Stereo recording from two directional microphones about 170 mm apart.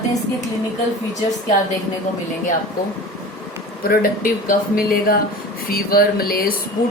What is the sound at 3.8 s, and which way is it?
Speech, 55° left (ahead or behind).